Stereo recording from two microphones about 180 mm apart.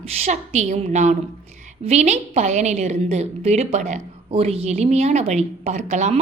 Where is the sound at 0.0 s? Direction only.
35° right (ahead or behind).